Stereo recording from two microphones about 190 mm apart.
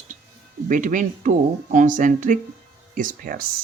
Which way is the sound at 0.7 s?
45° right (ahead or behind).